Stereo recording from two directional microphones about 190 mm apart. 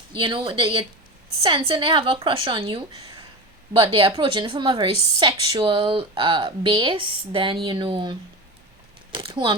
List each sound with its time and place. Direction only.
0.1 s a woman's voice: 25° right (ahead or behind)
9.1 s a woman's voice: 25° right (ahead or behind)